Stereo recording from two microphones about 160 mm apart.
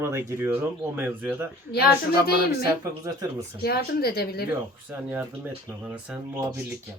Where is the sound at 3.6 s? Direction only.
80° left.